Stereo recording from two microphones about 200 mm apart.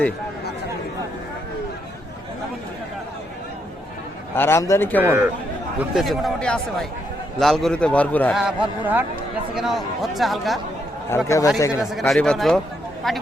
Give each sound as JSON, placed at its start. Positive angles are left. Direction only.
{"t": 4.4, "sound": "a man's voice", "side_deg": 10}
{"t": 5.0, "sound": "speech", "side_deg": -10}
{"t": 5.9, "sound": "speech", "side_deg": 0}
{"t": 8.4, "sound": "speech", "side_deg": -5}
{"t": 11.3, "sound": "a man's voice", "side_deg": 15}
{"t": 11.8, "sound": "speech", "side_deg": 0}